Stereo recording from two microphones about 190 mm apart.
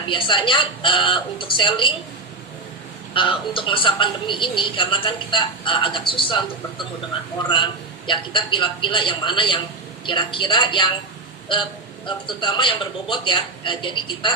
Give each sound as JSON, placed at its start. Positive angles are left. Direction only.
{"t": 0.1, "sound": "a woman's voice", "side_deg": 25}
{"t": 3.2, "sound": "a woman's voice", "side_deg": 25}
{"t": 12.0, "sound": "a woman's voice", "side_deg": 25}